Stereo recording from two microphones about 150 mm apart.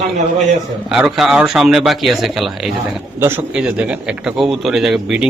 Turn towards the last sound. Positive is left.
turn(degrees=-5)  # may be behind; listen again after turning